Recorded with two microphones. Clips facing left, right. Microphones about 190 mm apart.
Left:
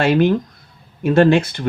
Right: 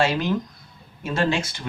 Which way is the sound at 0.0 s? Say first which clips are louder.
Left 7 dB; 60° left (ahead or behind).